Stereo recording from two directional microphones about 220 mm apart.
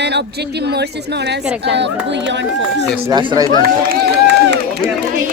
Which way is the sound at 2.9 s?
10° right (ahead or behind).